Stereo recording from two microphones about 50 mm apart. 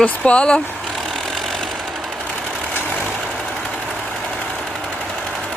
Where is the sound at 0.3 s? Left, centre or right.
Centre.